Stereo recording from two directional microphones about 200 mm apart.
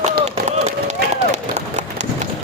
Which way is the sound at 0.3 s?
35° right (ahead or behind).